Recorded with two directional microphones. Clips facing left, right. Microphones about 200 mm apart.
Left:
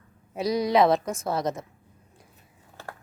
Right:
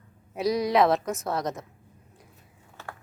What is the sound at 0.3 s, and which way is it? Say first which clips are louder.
A woman's voice: left 1 dB; centre (ahead or behind).